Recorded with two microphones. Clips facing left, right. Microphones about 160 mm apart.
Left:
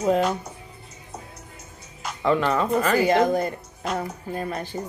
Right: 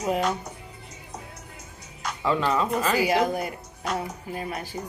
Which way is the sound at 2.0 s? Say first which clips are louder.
Left 3 dB; centre (ahead or behind).